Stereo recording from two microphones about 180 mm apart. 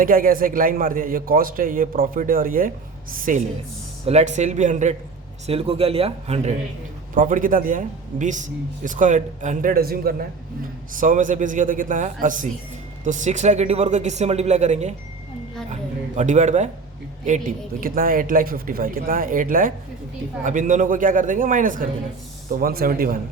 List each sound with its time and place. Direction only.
0.0 s a man's voice: 50° right (ahead or behind)
4.0 s speech: 40° right (ahead or behind)
7.1 s a man's voice: 45° right (ahead or behind)